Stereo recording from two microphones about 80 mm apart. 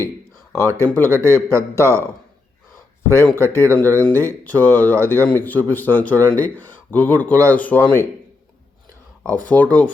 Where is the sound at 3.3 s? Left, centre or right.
Left.